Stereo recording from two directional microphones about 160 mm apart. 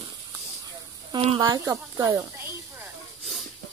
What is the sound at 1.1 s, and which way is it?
Speech, 35° right (ahead or behind).